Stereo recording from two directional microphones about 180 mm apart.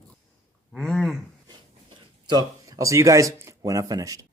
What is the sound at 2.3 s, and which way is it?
Speech, 20° right (ahead or behind).